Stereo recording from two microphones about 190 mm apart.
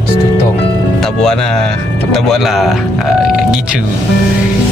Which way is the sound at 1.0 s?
5° left (ahead or behind).